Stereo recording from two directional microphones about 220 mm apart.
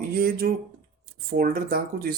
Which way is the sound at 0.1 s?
45° right (ahead or behind).